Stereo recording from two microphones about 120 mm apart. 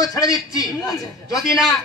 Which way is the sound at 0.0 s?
30° left (ahead or behind).